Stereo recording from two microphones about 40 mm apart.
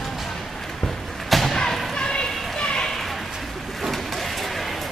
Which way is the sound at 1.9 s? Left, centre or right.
Centre.